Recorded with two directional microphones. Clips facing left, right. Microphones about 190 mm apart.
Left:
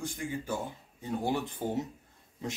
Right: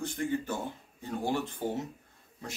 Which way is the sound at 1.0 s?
15° left (ahead or behind).